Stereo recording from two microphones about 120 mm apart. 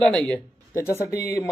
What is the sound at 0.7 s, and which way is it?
Speech, 25° left (ahead or behind).